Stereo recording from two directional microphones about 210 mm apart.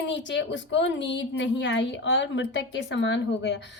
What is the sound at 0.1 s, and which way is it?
A woman's voice, 60° left (ahead or behind).